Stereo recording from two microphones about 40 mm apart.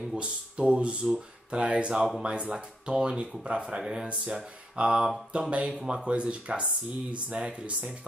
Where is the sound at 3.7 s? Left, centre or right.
Centre.